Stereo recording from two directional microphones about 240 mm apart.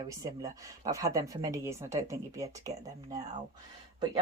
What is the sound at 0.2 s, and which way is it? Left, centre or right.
Speech, centre.